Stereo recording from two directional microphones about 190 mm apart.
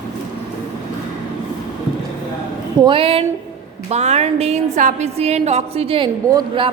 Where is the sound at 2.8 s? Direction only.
30° right (ahead or behind).